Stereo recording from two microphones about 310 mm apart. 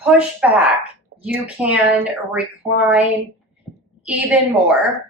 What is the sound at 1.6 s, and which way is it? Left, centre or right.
A woman's voice, centre.